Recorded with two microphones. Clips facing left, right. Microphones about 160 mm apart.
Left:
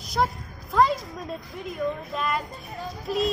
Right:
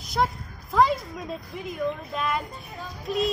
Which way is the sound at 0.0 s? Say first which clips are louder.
Even; centre (ahead or behind).